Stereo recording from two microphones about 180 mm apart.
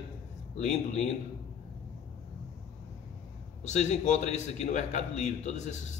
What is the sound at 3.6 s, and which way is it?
A man's voice, 40° left (ahead or behind).